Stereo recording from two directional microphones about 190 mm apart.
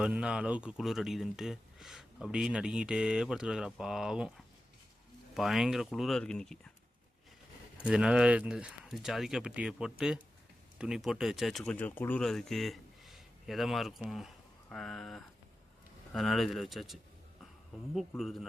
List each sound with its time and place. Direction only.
0.0 s speech: 5° right (ahead or behind)
7.9 s speech: 5° right (ahead or behind)
18.2 s speech: centre (ahead or behind)